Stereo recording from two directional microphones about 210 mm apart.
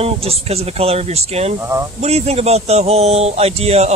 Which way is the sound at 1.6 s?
10° right (ahead or behind).